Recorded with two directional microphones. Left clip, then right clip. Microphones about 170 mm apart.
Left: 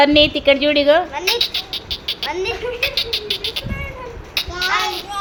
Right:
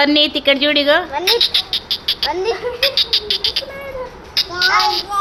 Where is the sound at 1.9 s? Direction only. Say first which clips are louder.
Right 4 dB; 5° left (ahead or behind).